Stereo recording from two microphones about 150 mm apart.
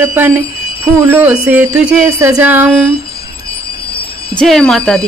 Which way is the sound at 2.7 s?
5° left (ahead or behind).